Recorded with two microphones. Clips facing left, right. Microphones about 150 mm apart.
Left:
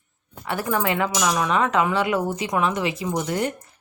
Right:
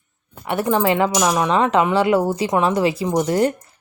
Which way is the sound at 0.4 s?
25° right (ahead or behind).